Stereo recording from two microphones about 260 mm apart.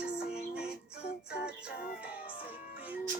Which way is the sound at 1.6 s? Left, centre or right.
Left.